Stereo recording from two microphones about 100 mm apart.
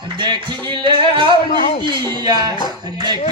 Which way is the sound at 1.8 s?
50° right (ahead or behind).